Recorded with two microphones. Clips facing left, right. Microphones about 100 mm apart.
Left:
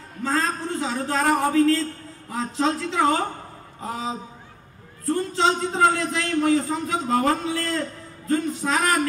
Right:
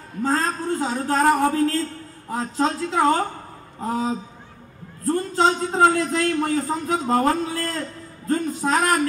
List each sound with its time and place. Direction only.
0.2 s a man's voice: 45° right (ahead or behind)
5.0 s a man's voice: 45° right (ahead or behind)